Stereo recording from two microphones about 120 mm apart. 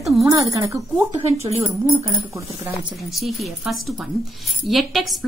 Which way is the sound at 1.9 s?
40° right (ahead or behind).